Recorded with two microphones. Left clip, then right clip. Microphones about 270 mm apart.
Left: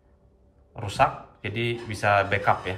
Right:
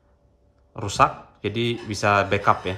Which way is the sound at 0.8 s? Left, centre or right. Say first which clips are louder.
Right 3 dB; centre.